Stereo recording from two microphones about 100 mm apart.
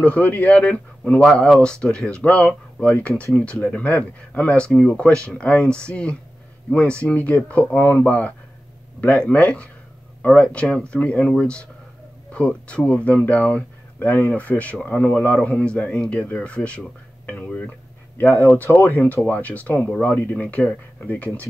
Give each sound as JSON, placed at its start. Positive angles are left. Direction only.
{"t": 0.0, "sound": "speech", "side_deg": 15}